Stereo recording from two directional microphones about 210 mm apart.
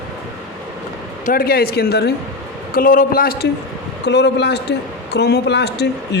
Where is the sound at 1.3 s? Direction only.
45° left (ahead or behind).